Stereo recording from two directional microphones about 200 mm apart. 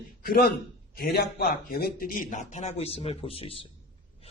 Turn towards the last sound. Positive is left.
turn(degrees=30)  # may be behind; listen again after turning